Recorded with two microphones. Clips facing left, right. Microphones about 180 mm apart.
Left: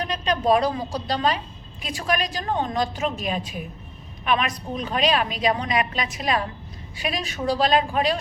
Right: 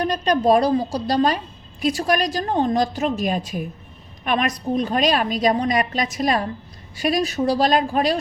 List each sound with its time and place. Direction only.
0.0 s a woman's voice: 40° right (ahead or behind)